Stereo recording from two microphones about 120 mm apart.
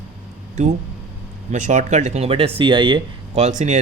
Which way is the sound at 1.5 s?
90° right.